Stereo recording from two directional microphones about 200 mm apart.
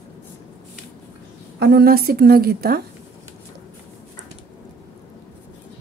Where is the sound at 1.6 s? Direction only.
55° right (ahead or behind).